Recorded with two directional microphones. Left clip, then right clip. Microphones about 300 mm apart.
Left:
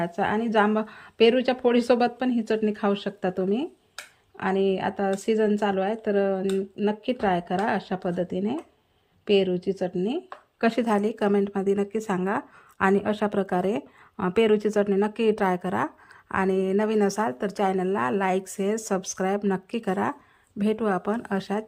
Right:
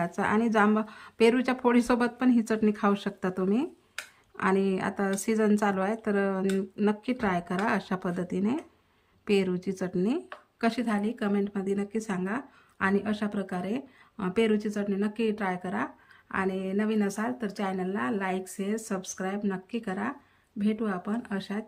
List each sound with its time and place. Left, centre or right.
0.0 s speech: centre